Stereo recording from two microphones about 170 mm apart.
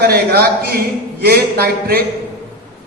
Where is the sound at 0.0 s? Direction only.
65° right (ahead or behind).